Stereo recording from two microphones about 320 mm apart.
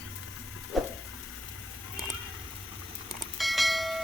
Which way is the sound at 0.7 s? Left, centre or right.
Centre.